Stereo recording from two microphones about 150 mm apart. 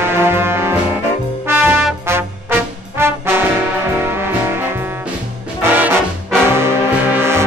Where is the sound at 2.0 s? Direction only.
15° right (ahead or behind).